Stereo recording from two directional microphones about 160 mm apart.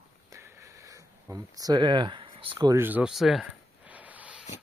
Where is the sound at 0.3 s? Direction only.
15° right (ahead or behind); by 2.5 s 35° right (ahead or behind).